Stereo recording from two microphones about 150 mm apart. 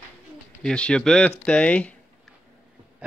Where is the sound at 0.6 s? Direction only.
5° left (ahead or behind).